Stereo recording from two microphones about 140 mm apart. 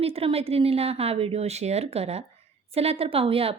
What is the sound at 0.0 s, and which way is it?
A woman's voice, 45° right (ahead or behind).